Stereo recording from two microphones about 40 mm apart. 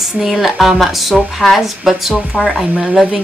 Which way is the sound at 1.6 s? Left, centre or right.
Centre.